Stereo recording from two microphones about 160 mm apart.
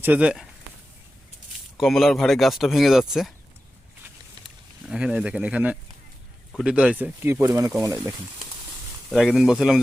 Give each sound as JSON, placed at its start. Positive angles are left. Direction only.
{"t": 0.0, "sound": "speech", "side_deg": -10}
{"t": 1.8, "sound": "speech", "side_deg": 0}
{"t": 4.4, "sound": "speech", "side_deg": -5}
{"t": 9.0, "sound": "speech", "side_deg": 0}